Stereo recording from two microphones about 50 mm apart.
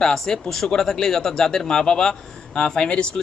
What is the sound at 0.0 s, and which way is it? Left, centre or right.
Speech, centre.